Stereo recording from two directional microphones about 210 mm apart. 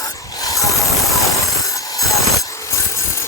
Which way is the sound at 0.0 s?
15° left (ahead or behind).